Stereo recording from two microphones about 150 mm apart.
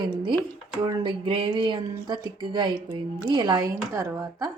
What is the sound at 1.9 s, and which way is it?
A woman's voice, 30° right (ahead or behind).